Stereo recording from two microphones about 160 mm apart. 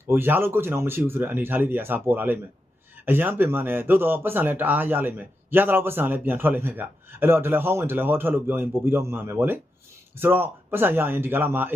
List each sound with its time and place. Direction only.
0.1 s speech: 15° right (ahead or behind)